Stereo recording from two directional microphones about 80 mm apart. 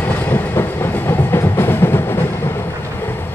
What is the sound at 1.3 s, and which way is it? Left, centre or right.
Music, left.